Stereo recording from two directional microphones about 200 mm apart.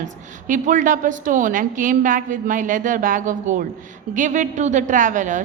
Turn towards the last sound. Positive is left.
turn(degrees=-40)  # may be behind; listen again after turning